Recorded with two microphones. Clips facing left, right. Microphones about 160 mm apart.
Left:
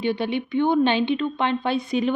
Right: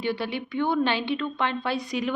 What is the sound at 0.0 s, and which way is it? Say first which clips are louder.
Speech: left 4 dB; 20° left (ahead or behind).